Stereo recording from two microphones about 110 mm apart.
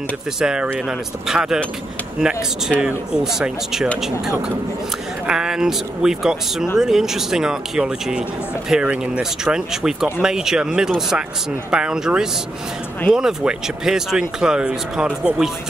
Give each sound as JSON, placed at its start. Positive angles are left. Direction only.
{"t": 0.4, "sound": "speech", "side_deg": -5}
{"t": 5.2, "sound": "speech", "side_deg": -5}